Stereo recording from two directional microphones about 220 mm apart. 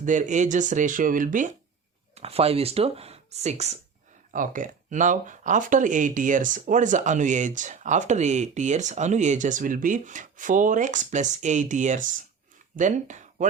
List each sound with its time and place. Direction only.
0.0 s speech: 35° right (ahead or behind)